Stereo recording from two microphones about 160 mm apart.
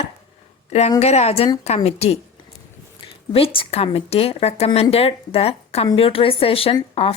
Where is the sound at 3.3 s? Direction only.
35° left (ahead or behind).